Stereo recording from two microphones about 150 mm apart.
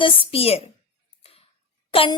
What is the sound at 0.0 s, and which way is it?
Speech, 35° left (ahead or behind).